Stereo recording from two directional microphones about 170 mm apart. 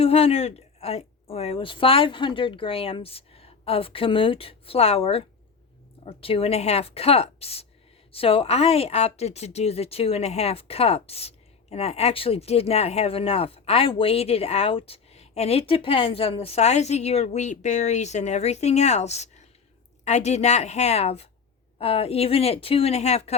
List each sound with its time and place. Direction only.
0.0 s a woman's voice: 35° left (ahead or behind)